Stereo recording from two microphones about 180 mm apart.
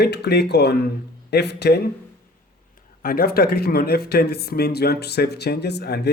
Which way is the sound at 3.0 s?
55° left (ahead or behind).